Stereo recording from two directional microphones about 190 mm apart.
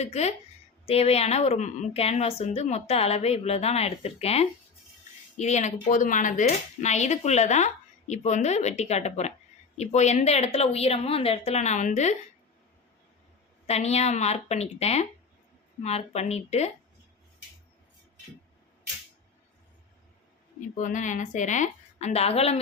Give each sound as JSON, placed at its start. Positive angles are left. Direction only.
{"t": 0.0, "sound": "speech", "side_deg": 35}
{"t": 13.7, "sound": "speech", "side_deg": 35}
{"t": 20.6, "sound": "speech", "side_deg": 40}